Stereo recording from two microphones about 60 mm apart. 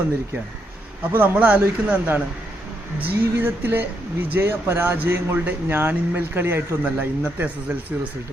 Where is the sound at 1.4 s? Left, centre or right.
Right.